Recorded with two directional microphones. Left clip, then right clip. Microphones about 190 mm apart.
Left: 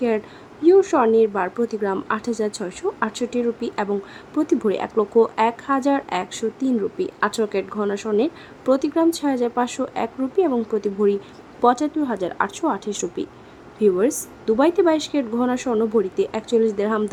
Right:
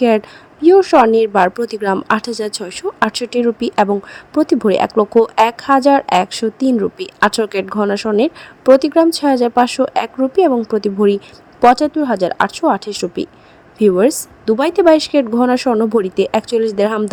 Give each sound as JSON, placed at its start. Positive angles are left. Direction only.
{"t": 0.6, "sound": "a woman's voice", "side_deg": -30}